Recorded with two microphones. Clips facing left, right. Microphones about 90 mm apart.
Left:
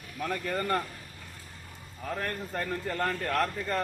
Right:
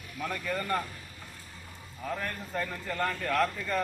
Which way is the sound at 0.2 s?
40° left (ahead or behind).